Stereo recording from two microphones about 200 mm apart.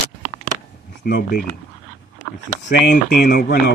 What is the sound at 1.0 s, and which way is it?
Speech, 50° left (ahead or behind).